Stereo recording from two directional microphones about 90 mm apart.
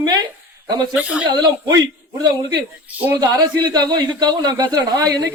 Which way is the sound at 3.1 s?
45° right (ahead or behind).